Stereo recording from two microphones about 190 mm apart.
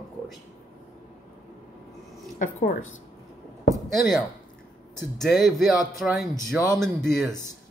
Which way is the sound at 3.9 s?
Centre (ahead or behind).